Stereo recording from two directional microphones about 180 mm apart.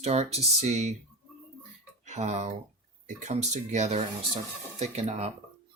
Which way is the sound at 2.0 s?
40° right (ahead or behind).